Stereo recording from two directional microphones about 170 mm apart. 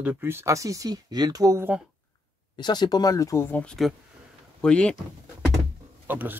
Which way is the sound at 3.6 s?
Centre (ahead or behind).